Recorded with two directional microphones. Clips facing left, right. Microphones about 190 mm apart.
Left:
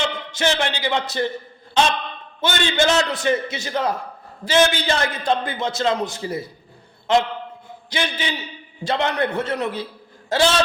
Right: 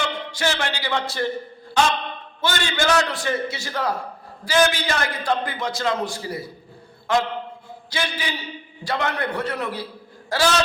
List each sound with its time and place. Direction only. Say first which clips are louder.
0.0 s a man's voice: left 2 dB; 20° left (ahead or behind)